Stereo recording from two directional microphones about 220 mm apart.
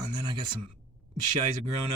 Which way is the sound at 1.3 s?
30° right (ahead or behind).